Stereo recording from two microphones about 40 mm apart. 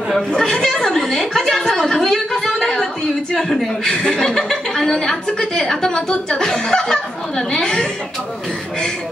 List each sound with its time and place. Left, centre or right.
0.4 s a woman's voice: centre